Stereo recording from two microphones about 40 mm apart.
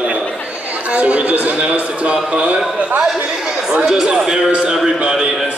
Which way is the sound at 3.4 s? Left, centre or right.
Centre.